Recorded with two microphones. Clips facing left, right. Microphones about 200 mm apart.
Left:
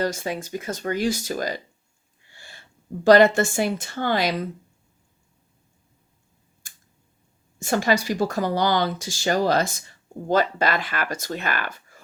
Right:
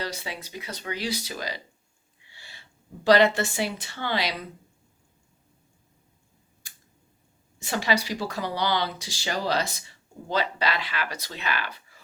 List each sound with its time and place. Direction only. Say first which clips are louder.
0.0 s a woman's voice: left 8 dB; 45° left (ahead or behind)
6.6 s scissors: left 1 dB; 45° left (ahead or behind)
7.6 s speech: left 5 dB; 50° left (ahead or behind)